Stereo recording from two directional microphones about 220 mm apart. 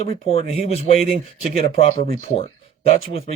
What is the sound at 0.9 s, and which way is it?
Speech, 45° right (ahead or behind).